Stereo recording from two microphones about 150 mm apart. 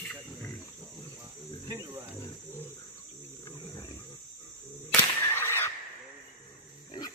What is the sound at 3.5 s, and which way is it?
Wild animals, 25° left (ahead or behind).